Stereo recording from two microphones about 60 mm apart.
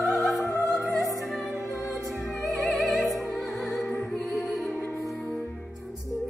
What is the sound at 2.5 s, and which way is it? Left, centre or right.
Music, centre.